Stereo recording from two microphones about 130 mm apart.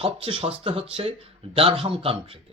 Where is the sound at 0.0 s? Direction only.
45° right (ahead or behind).